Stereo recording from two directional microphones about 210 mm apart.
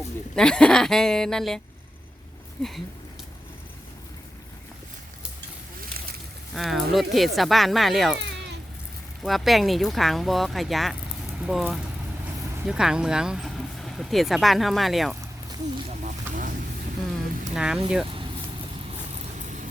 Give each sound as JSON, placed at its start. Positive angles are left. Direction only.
{"t": 0.3, "sound": "speech", "side_deg": 5}
{"t": 5.8, "sound": "boat", "side_deg": -45}
{"t": 6.5, "sound": "speech", "side_deg": 0}
{"t": 8.2, "sound": "a sound", "side_deg": -55}
{"t": 9.2, "sound": "speech", "side_deg": 0}
{"t": 16.0, "sound": "vehicle", "side_deg": -40}
{"t": 17.5, "sound": "speech", "side_deg": -5}